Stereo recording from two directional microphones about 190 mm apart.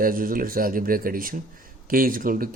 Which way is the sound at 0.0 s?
45° right (ahead or behind).